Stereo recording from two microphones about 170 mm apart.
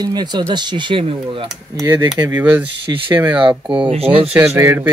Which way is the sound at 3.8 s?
35° right (ahead or behind).